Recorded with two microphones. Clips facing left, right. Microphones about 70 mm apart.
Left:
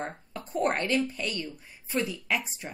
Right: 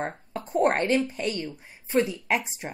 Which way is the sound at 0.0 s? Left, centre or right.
Right.